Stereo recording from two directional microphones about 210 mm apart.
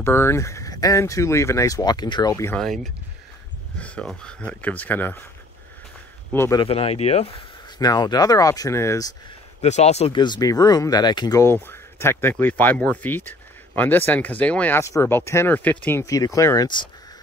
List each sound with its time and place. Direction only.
0.0 s speech: 10° left (ahead or behind)
2.6 s speech: centre (ahead or behind)
6.3 s speech: 10° left (ahead or behind)
6.6 s speech: 30° left (ahead or behind)
7.8 s speech: 20° left (ahead or behind)
9.6 s speech: 30° left (ahead or behind)